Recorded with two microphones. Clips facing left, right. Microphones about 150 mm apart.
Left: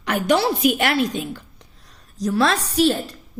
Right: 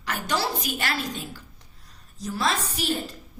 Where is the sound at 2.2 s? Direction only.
75° left (ahead or behind).